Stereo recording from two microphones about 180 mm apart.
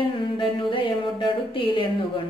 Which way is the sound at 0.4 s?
30° left (ahead or behind).